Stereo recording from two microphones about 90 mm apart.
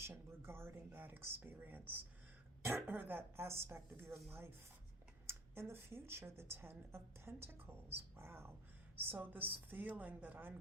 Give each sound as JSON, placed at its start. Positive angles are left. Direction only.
{"t": 0.0, "sound": "a woman's voice", "side_deg": -25}